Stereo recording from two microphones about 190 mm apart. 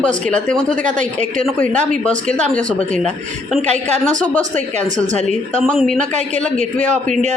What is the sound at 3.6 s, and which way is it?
A woman's voice, 40° right (ahead or behind).